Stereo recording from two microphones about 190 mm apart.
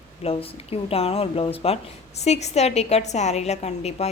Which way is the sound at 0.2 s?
30° left (ahead or behind).